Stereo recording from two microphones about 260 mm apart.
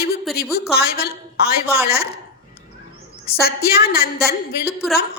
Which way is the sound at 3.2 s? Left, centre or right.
Left.